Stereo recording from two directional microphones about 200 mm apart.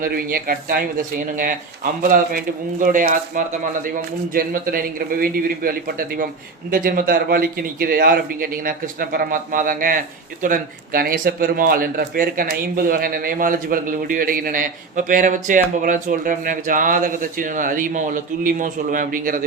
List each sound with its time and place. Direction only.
0.0 s speech: 50° right (ahead or behind)